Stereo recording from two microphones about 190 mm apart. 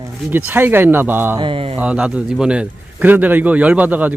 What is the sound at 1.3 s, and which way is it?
Speech, 25° right (ahead or behind).